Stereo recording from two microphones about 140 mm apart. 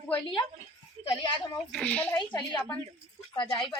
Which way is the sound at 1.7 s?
10° left (ahead or behind).